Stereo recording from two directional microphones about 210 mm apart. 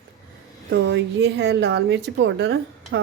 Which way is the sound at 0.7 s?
60° right (ahead or behind).